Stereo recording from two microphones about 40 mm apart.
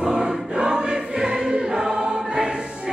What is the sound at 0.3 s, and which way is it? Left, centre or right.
Choir, right.